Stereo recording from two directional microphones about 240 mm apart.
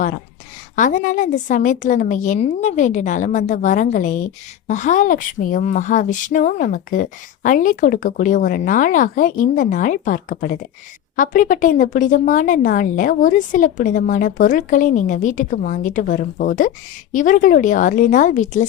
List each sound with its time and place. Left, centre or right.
0.8 s a woman's voice: left